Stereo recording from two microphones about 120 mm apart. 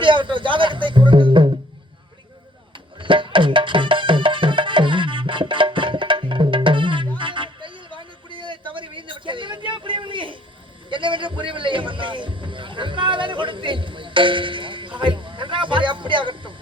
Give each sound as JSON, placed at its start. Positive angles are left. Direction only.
{"t": 0.0, "sound": "music", "side_deg": -45}
{"t": 3.0, "sound": "music", "side_deg": -45}